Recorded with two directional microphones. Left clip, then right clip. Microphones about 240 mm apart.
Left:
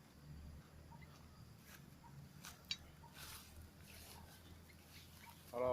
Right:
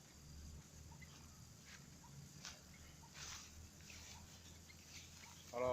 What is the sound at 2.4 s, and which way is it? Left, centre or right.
Tick-tock, left.